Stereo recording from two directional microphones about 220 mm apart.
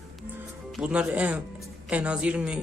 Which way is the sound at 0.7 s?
5° right (ahead or behind).